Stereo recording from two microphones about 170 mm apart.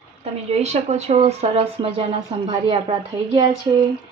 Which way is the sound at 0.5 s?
40° right (ahead or behind).